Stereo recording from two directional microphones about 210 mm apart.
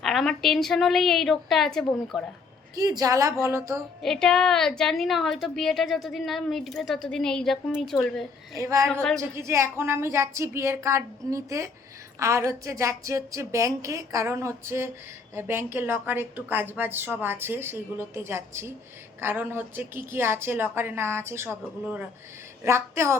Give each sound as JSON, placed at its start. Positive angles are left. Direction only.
{"t": 0.0, "sound": "a woman's voice", "side_deg": 0}
{"t": 2.7, "sound": "a woman's voice", "side_deg": -15}
{"t": 4.0, "sound": "a woman's voice", "side_deg": 5}
{"t": 8.5, "sound": "a woman's voice", "side_deg": -15}